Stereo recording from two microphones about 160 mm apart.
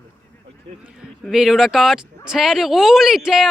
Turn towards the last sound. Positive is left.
turn(degrees=0)  # may be behind; listen again after turning